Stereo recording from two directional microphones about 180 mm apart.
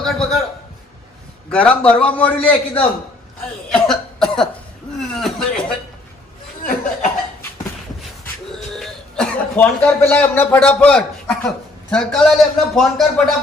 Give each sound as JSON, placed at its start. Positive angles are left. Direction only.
{"t": 0.0, "sound": "a sound", "side_deg": 0}
{"t": 1.5, "sound": "a man's voice", "side_deg": 5}
{"t": 3.7, "sound": "cough", "side_deg": 5}
{"t": 4.9, "sound": "chuckle", "side_deg": 0}
{"t": 8.7, "sound": "a man's voice", "side_deg": 5}